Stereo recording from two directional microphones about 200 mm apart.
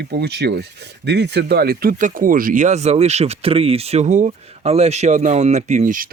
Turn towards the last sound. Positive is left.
turn(degrees=-40)  # may be behind; listen again after turning